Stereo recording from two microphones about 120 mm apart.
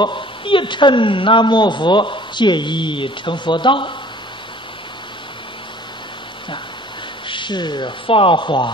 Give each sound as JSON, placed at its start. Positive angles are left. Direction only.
{"t": 0.0, "sound": "a woman's voice", "side_deg": 45}
{"t": 7.2, "sound": "a woman's voice", "side_deg": 40}